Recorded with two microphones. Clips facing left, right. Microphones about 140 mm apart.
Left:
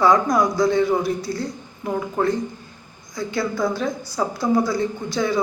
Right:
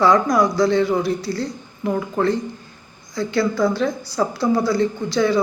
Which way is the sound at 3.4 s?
15° left (ahead or behind).